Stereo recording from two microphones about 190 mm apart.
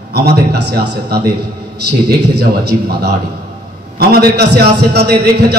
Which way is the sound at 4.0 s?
55° right (ahead or behind).